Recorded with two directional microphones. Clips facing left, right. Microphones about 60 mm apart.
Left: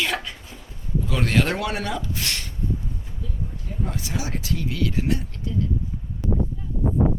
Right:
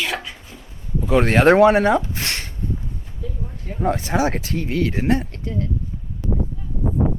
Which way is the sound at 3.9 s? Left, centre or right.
Right.